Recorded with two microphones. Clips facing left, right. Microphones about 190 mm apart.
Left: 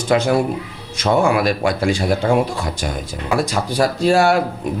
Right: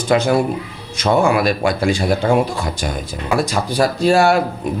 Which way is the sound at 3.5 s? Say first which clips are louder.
Right 1 dB; 30° right (ahead or behind).